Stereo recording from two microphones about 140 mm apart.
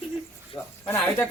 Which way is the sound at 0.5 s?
20° left (ahead or behind).